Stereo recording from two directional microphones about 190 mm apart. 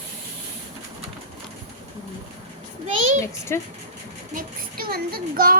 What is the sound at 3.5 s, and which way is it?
Speech, 15° left (ahead or behind).